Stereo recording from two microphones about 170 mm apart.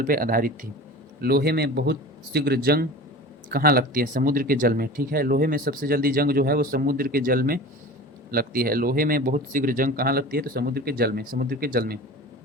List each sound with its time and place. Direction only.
0.0 s speech: 55° right (ahead or behind)
1.2 s speech: 65° right (ahead or behind)